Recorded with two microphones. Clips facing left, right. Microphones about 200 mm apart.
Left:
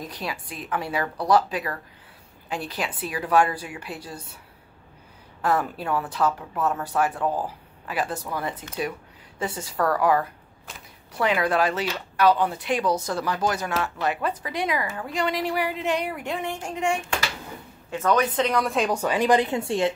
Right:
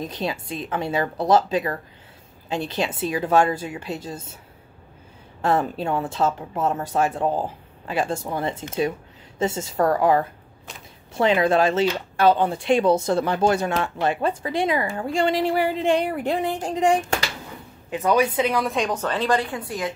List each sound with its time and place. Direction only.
0.0 s speech: 25° right (ahead or behind)
5.4 s speech: 25° right (ahead or behind)
17.8 s a woman's voice: 15° right (ahead or behind); by 19.9 s 25° left (ahead or behind)